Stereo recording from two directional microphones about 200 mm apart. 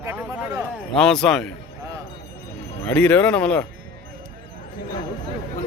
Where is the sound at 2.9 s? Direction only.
10° left (ahead or behind).